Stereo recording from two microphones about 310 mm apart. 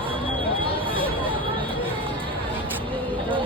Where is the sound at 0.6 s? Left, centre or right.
Centre.